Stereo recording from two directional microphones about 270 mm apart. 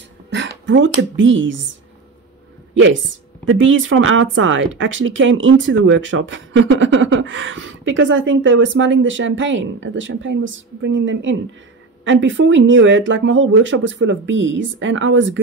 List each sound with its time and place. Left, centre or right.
0.3 s speech: right
2.7 s speech: right